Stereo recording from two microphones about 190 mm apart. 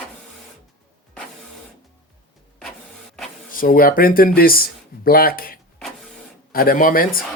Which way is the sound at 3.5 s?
50° left (ahead or behind).